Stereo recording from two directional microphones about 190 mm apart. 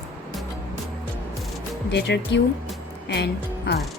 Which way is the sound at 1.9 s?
65° left (ahead or behind).